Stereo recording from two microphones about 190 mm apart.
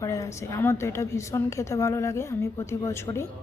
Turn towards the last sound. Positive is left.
turn(degrees=15)  # may be behind; listen again after turning